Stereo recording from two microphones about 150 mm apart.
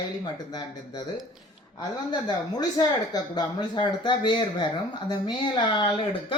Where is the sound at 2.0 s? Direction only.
30° left (ahead or behind).